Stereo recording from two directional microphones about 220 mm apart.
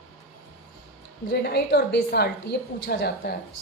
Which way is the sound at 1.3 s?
50° left (ahead or behind).